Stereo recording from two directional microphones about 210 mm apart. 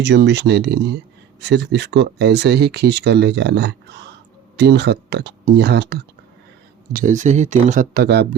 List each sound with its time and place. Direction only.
0.0 s speech: 55° right (ahead or behind)
6.9 s speech: 40° right (ahead or behind)